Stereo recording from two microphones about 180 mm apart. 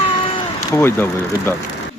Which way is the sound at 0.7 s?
15° left (ahead or behind).